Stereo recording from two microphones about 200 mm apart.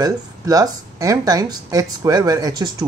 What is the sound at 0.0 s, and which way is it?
Speech, 20° right (ahead or behind).